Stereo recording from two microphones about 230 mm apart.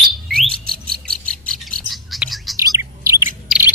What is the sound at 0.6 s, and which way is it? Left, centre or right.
Bird, right.